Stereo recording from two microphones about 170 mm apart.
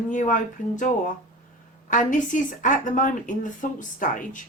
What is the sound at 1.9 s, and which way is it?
Speech, 50° left (ahead or behind).